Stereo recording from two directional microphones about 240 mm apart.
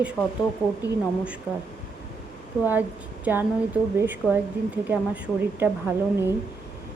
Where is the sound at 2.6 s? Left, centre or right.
Centre.